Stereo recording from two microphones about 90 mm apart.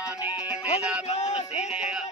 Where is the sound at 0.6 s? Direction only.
15° right (ahead or behind).